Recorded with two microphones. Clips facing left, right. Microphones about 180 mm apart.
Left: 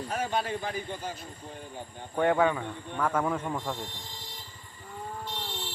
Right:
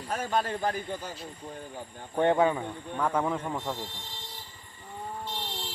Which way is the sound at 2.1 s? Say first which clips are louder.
Right 1 dB; 20° right (ahead or behind).